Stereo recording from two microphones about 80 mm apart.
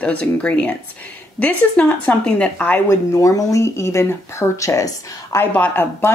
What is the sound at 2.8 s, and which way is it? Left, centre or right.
Speech, left.